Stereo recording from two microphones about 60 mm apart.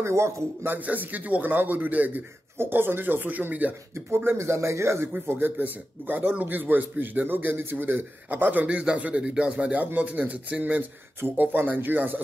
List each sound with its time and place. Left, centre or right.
0.0 s speech: right
0.7 s a man's voice: right
2.5 s speech: right
3.9 s speech: right
5.6 s a man's voice: right